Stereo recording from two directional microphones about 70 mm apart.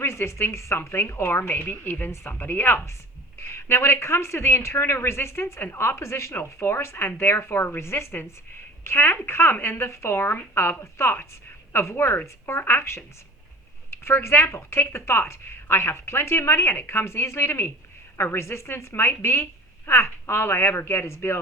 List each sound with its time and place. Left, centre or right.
0.0 s speech: left